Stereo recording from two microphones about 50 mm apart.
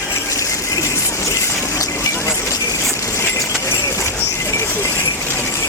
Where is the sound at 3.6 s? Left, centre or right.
Left.